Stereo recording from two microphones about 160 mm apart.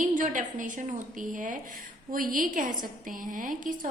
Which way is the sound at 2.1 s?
60° right (ahead or behind).